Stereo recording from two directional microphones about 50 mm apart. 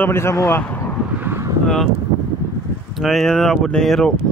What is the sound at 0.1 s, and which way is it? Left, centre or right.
Speech, left.